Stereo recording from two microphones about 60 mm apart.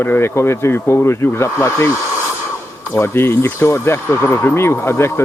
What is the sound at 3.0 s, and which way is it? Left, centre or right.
A man's voice, left.